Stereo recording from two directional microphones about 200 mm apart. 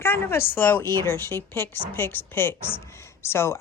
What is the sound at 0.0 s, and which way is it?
A woman's voice, 10° left (ahead or behind).